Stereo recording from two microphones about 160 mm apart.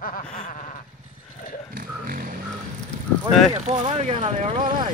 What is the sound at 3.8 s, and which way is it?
Vehicle, 40° right (ahead or behind).